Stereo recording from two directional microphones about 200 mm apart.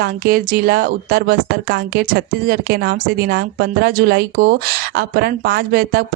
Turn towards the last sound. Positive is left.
turn(degrees=-50)  # may be behind; listen again after turning